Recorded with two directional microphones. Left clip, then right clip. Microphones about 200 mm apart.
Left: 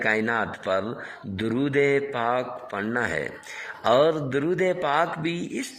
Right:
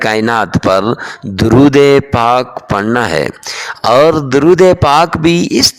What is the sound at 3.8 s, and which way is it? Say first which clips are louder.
Speech: right 12 dB; 50° right (ahead or behind).